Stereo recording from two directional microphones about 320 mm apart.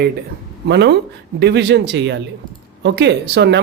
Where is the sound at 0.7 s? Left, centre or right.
Right.